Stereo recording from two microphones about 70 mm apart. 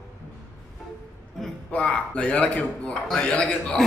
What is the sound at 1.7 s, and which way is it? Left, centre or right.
A man's voice, centre.